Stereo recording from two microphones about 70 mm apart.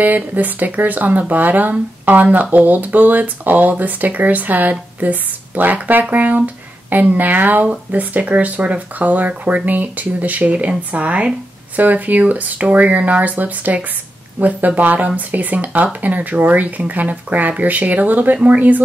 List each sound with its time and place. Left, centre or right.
0.0 s speech: right